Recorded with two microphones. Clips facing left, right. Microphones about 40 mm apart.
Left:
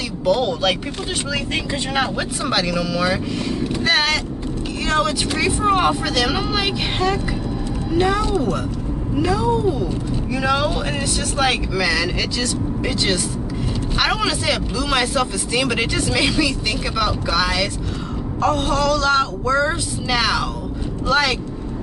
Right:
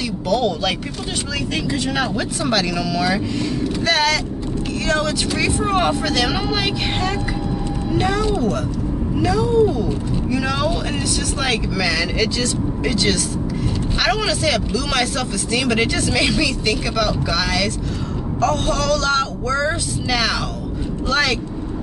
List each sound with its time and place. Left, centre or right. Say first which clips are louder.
0.2 s speech: left 1 dB; centre
1.3 s speech: right 2 dB; centre
2.4 s speech: even; centre
8.4 s speech: right 1 dB; centre